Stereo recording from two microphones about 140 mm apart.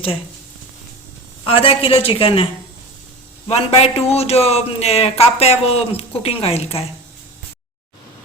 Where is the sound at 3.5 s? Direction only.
45° left (ahead or behind).